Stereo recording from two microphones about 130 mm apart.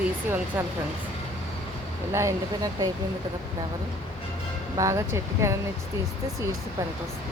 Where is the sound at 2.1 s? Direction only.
25° right (ahead or behind).